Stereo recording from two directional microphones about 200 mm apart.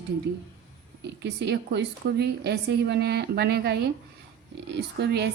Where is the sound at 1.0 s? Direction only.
60° right (ahead or behind).